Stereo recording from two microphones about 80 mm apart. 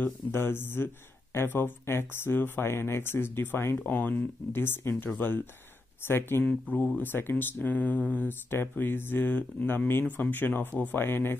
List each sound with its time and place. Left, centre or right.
0.0 s speech: left
6.4 s speech: centre